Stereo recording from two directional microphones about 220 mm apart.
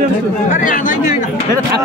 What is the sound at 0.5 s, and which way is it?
Speech, 35° left (ahead or behind).